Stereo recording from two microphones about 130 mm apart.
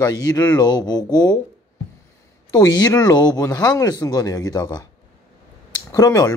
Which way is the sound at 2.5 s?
30° left (ahead or behind).